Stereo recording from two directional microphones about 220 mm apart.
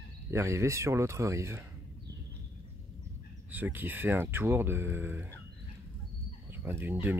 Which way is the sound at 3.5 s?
10° right (ahead or behind).